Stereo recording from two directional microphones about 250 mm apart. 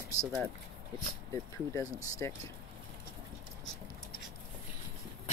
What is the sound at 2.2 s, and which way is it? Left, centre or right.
Speech, centre.